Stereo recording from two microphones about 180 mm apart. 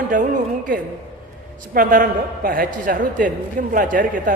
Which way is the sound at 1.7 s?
50° right (ahead or behind).